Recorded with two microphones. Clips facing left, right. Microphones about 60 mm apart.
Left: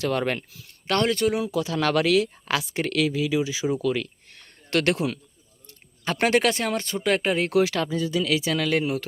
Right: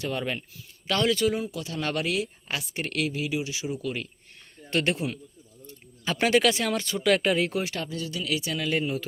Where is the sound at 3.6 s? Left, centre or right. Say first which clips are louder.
Left 7 dB; left.